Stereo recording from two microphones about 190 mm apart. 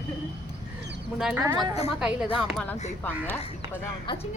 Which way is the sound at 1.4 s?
20° right (ahead or behind).